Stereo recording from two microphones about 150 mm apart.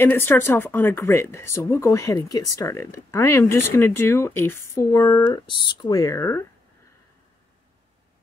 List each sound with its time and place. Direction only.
0.0 s speech: 15° left (ahead or behind)